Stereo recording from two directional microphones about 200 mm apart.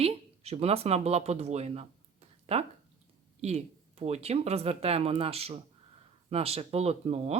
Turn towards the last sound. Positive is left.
turn(degrees=-30)  # may be behind; listen again after turning